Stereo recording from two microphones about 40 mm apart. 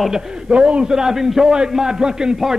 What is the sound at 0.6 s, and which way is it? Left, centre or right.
Speech, right.